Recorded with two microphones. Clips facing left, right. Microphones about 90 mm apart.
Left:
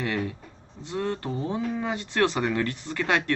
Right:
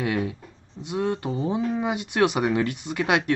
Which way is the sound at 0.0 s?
15° right (ahead or behind).